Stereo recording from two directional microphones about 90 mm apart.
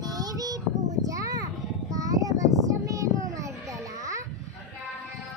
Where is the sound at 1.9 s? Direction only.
40° right (ahead or behind).